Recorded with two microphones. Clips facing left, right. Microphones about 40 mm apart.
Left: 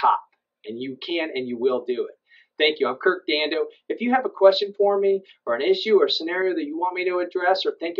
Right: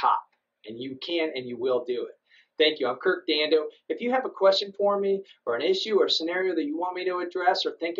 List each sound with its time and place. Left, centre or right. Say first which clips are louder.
0.7 s speech: left 4 dB; centre